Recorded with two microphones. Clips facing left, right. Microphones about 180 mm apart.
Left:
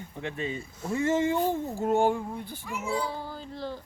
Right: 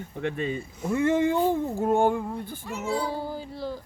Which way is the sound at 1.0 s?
55° right (ahead or behind).